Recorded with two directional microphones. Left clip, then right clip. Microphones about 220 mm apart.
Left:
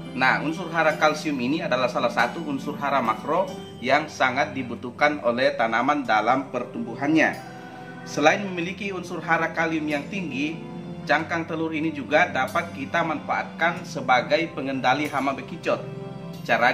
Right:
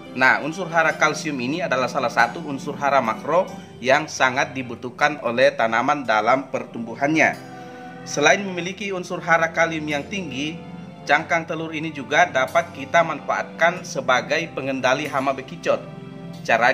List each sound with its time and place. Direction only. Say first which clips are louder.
0.1 s a man's voice: right 4 dB; 50° right (ahead or behind)